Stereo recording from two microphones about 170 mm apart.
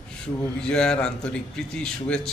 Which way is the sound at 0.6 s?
5° left (ahead or behind).